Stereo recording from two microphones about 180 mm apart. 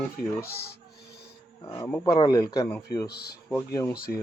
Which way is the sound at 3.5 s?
15° left (ahead or behind).